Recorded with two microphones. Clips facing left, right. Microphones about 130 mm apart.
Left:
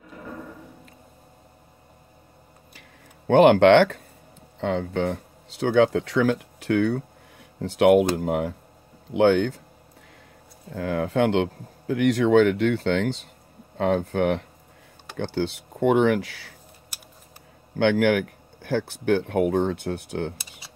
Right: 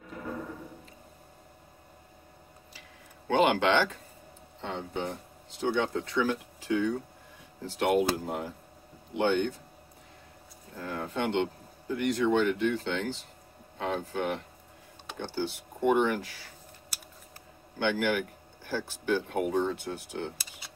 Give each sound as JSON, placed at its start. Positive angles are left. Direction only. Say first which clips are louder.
{"t": 3.3, "sound": "speech", "louder": "left 10 dB", "side_deg": 60}
{"t": 4.6, "sound": "speech", "louder": "left 10 dB", "side_deg": 90}
{"t": 9.1, "sound": "speech", "louder": "left 8 dB", "side_deg": 90}
{"t": 10.7, "sound": "speech", "louder": "left 10 dB", "side_deg": 75}
{"t": 13.7, "sound": "speech", "louder": "left 9 dB", "side_deg": 60}
{"t": 17.7, "sound": "speech", "louder": "left 8 dB", "side_deg": 65}